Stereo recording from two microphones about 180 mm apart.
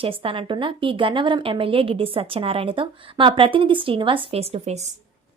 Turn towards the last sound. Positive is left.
turn(degrees=-35)  # may be behind; listen again after turning